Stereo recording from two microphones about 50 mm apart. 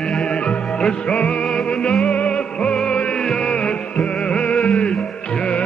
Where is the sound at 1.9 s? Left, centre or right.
Centre.